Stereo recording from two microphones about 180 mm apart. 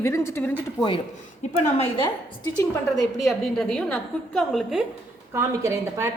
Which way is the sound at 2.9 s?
Centre (ahead or behind).